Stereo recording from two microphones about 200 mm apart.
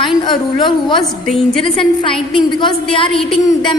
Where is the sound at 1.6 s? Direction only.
25° left (ahead or behind).